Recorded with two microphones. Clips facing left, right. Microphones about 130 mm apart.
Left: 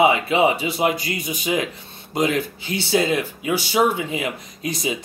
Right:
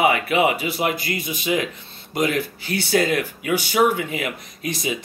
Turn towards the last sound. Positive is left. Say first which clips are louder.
# left 1 dB
turn(degrees=25)  # may be behind; listen again after turning